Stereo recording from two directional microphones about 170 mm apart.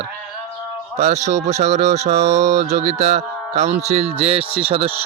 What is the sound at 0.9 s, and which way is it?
Speech, 40° right (ahead or behind).